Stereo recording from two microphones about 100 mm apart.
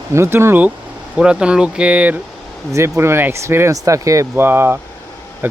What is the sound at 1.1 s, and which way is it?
Speech, 10° right (ahead or behind).